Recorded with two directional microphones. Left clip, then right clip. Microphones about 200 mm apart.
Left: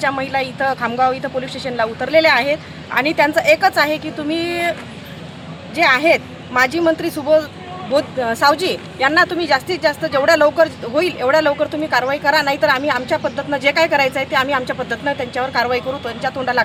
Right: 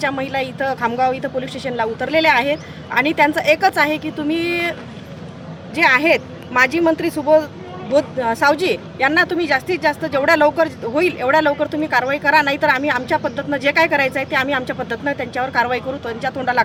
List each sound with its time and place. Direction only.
0.0 s speech: 25° right (ahead or behind)
5.7 s speech: 30° right (ahead or behind)